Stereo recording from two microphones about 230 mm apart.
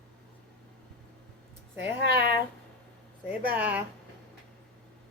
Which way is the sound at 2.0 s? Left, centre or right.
Right.